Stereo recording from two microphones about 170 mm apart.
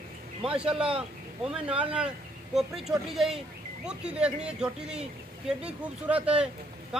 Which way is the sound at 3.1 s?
Centre (ahead or behind).